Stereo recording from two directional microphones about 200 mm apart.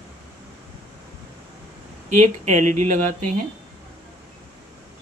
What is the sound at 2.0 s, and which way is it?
Speech, 40° right (ahead or behind).